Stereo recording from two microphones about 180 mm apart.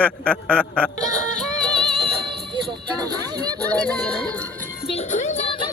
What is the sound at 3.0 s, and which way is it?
Speech, 20° right (ahead or behind).